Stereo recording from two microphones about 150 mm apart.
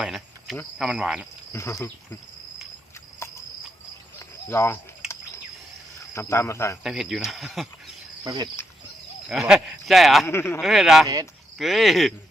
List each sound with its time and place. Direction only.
0.0 s cricket: centre (ahead or behind)
0.8 s speech: 5° right (ahead or behind)
1.5 s speech: 20° left (ahead or behind)
4.4 s cricket: 15° left (ahead or behind)
6.1 s speech: 15° left (ahead or behind)
6.8 s speech: centre (ahead or behind)
8.2 s speech: 25° right (ahead or behind)
9.3 s speech: 5° right (ahead or behind)
10.2 s speech: 15° left (ahead or behind)
10.6 s speech: centre (ahead or behind)
11.0 s speech: 25° right (ahead or behind)
11.5 s speech: centre (ahead or behind)